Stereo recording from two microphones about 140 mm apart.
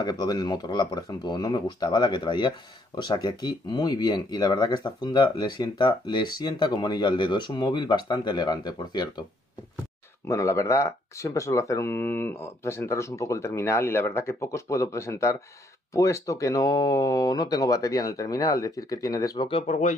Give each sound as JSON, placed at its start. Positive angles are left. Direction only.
{"t": 0.0, "sound": "speech", "side_deg": 30}
{"t": 10.2, "sound": "speech", "side_deg": 20}
{"t": 19.4, "sound": "speech", "side_deg": 40}